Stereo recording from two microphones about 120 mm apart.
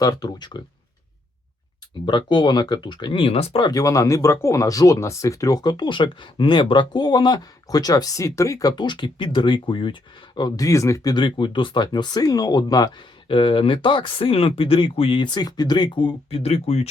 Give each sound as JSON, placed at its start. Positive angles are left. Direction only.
{"t": 0.0, "sound": "speech", "side_deg": 30}
{"t": 2.0, "sound": "speech", "side_deg": 40}
{"t": 3.6, "sound": "speech", "side_deg": 30}
{"t": 13.2, "sound": "speech", "side_deg": 45}